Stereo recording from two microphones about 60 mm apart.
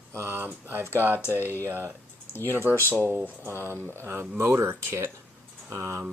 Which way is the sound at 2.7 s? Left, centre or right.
Left.